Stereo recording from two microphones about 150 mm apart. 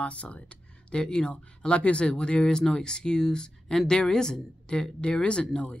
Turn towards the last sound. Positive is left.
turn(degrees=5)  # may be behind; listen again after turning